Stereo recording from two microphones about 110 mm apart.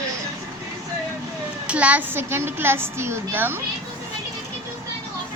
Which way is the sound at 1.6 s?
10° right (ahead or behind).